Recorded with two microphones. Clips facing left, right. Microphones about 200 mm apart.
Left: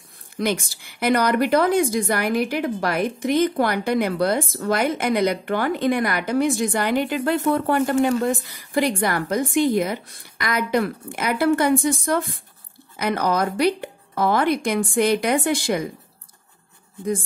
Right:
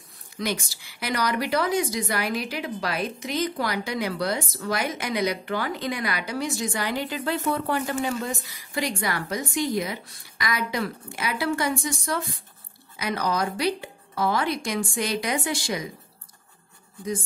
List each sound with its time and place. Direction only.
0.4 s a woman's voice: 55° left (ahead or behind)